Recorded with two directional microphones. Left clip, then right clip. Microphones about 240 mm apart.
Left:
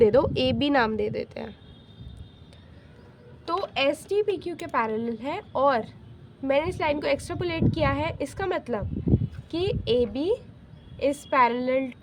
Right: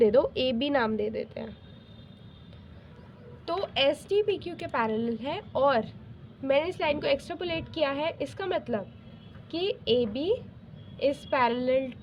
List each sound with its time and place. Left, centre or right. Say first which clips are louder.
0.0 s a woman's voice: left 3 dB; left
3.4 s a woman's voice: left 1 dB; centre